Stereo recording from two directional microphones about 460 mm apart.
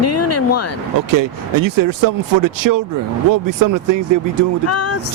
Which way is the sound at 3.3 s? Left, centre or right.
Right.